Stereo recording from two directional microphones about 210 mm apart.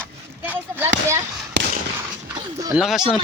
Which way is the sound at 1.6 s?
55° right (ahead or behind).